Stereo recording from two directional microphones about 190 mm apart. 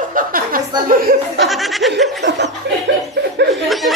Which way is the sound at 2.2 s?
65° right (ahead or behind).